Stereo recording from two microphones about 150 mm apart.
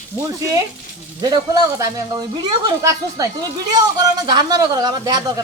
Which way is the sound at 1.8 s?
25° right (ahead or behind).